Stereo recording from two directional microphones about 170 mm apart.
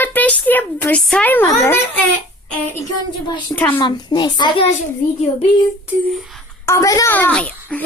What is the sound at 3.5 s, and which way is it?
Speech, 10° left (ahead or behind).